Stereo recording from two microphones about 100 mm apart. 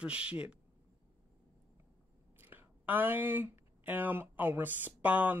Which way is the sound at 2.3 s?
20° right (ahead or behind).